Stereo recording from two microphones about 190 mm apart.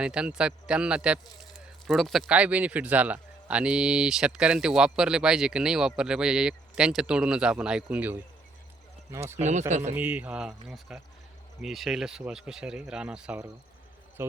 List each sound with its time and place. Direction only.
0.0 s speech: 5° right (ahead or behind)
9.4 s speech: 40° right (ahead or behind)
9.9 s speech: 10° right (ahead or behind)